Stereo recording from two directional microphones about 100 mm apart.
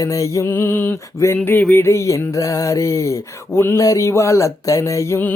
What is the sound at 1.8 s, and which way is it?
Mantra, 30° left (ahead or behind).